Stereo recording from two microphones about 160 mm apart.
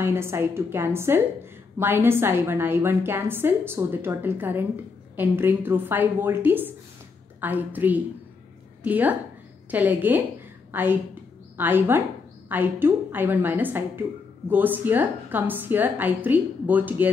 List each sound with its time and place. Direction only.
0.0 s a woman's voice: 15° right (ahead or behind)